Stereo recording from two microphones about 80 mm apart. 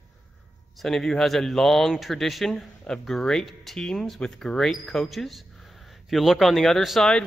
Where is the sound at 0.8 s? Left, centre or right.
Centre.